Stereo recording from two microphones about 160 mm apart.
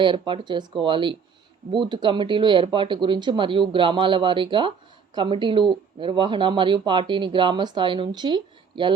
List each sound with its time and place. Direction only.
0.0 s speech: 30° right (ahead or behind)